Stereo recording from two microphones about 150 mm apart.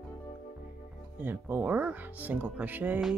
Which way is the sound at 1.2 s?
10° right (ahead or behind).